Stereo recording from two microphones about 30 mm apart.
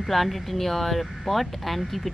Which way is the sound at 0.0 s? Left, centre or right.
Centre.